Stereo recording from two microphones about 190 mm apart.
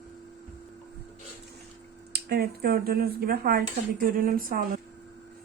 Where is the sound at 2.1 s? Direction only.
55° right (ahead or behind).